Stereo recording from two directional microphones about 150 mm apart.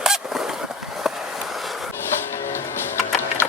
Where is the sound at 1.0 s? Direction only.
Centre (ahead or behind).